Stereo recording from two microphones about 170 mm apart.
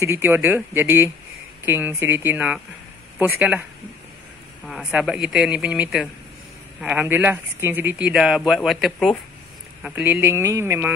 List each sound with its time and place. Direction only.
0.0 s speech: 15° right (ahead or behind)
4.6 s speech: centre (ahead or behind)